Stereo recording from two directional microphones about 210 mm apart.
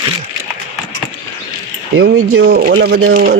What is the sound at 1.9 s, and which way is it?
Speech, 65° right (ahead or behind).